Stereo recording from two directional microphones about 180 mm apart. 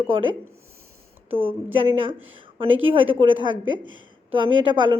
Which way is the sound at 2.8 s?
30° right (ahead or behind).